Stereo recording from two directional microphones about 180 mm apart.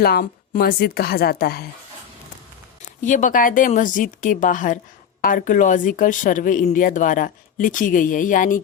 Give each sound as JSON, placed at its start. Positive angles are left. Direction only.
{"t": 0.0, "sound": "a woman's voice", "side_deg": 55}
{"t": 3.0, "sound": "speech", "side_deg": 45}